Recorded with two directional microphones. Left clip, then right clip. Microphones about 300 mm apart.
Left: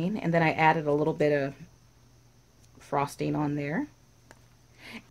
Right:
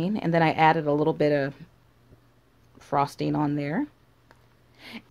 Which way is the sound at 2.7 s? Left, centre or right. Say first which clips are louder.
Right 4 dB; right.